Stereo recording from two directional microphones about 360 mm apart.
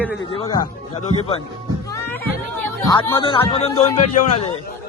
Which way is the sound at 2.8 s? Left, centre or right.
Centre.